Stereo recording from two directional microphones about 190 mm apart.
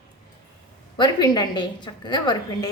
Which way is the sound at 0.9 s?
25° left (ahead or behind).